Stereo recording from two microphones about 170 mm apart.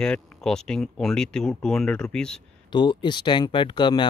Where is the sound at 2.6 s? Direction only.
25° left (ahead or behind).